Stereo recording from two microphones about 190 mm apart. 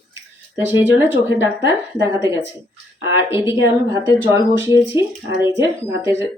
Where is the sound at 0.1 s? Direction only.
10° right (ahead or behind).